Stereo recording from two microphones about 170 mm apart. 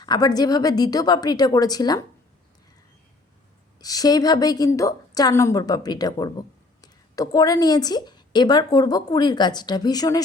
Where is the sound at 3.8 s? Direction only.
20° left (ahead or behind).